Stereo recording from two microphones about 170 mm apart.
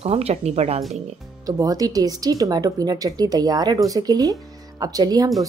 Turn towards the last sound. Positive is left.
turn(degrees=-20)  # may be behind; listen again after turning